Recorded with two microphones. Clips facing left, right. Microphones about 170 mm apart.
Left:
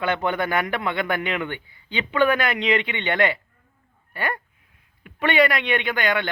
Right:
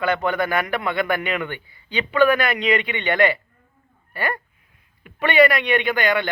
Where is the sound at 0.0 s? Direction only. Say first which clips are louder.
Right 2 dB; 20° left (ahead or behind).